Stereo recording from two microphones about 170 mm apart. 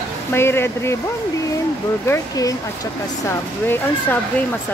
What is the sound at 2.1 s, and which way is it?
Speech, 20° left (ahead or behind).